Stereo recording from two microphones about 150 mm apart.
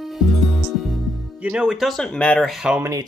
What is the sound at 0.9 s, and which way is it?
Speech, 5° right (ahead or behind).